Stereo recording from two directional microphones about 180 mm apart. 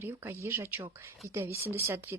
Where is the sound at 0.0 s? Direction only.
15° right (ahead or behind).